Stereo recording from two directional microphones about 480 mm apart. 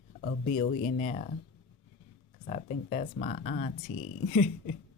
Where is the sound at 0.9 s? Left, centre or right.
Centre.